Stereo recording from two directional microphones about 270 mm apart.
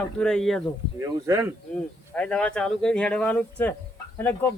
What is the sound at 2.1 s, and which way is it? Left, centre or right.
Speech, centre.